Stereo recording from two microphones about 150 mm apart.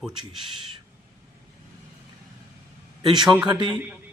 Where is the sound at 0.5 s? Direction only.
35° right (ahead or behind).